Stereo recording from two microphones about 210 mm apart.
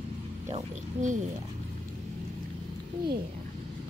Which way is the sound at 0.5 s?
35° right (ahead or behind).